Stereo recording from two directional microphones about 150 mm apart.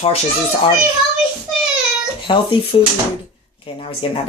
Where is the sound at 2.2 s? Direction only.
35° left (ahead or behind).